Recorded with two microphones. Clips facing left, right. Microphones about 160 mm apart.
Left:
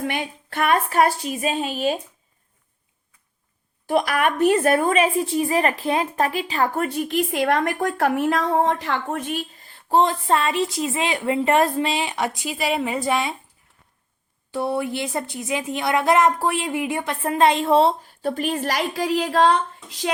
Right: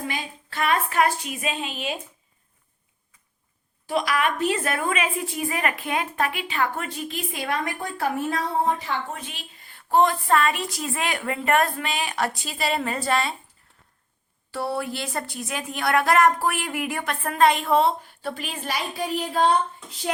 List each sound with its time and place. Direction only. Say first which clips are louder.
0.0 s a sound: left 5 dB; 60° left (ahead or behind)
0.9 s a woman's voice: left 3 dB; 40° left (ahead or behind)
3.8 s a woman's voice: left 3 dB; 50° left (ahead or behind); by 6.8 s 35° left (ahead or behind)
6.9 s a woman's voice: left 9 dB; 60° left (ahead or behind); by 9.2 s 75° left (ahead or behind)
9.6 s a woman's voice: left 1 dB; 30° left (ahead or behind)
14.5 s a woman's voice: left 4 dB; 20° left (ahead or behind); by 18.6 s 45° left (ahead or behind)
18.6 s a woman's voice: left 5 dB; 90° left